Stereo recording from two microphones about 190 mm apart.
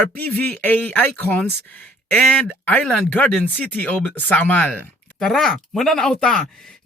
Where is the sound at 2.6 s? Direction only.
5° left (ahead or behind).